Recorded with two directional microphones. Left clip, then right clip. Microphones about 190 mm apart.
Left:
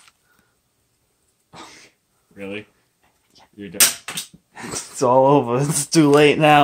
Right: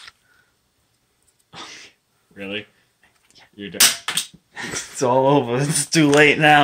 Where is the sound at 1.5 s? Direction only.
30° left (ahead or behind).